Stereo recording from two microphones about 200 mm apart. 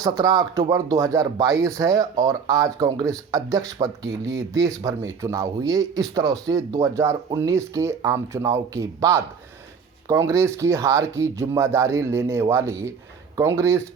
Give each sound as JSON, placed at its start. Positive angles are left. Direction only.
{"t": 0.0, "sound": "speech", "side_deg": -15}